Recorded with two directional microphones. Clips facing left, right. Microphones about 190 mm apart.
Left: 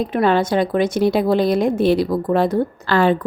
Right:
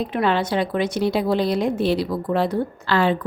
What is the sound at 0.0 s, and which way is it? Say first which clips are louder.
A woman's voice: left 4 dB; 45° left (ahead or behind).